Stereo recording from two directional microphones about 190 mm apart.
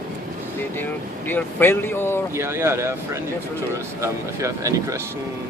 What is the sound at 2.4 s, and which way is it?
Speech, 15° right (ahead or behind).